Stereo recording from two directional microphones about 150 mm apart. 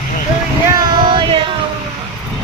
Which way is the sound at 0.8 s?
30° right (ahead or behind).